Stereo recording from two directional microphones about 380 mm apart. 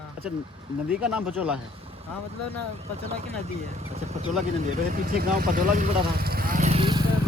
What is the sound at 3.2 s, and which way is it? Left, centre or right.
Speech, centre.